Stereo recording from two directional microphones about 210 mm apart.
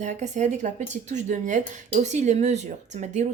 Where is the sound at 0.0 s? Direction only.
35° right (ahead or behind).